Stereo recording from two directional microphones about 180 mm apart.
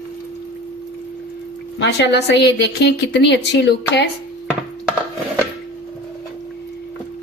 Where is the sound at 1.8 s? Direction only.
75° left (ahead or behind).